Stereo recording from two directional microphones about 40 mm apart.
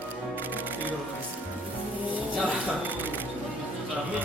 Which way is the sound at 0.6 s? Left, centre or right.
Right.